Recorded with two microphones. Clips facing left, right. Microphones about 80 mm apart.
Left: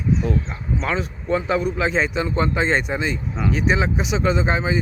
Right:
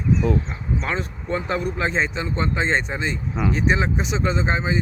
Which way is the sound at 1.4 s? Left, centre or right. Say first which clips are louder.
Left 2 dB; centre.